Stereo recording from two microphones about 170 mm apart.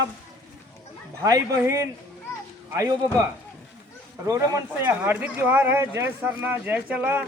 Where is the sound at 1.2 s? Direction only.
20° right (ahead or behind).